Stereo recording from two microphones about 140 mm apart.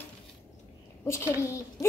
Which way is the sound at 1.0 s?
20° left (ahead or behind).